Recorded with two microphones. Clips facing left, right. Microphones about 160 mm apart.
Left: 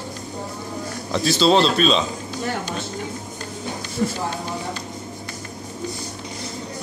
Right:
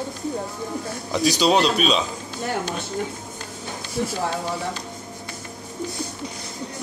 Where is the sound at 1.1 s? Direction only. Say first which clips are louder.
Left 2 dB; 15° right (ahead or behind).